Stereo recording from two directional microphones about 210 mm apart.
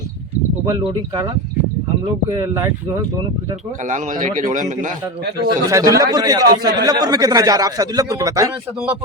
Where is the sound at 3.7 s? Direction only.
35° right (ahead or behind).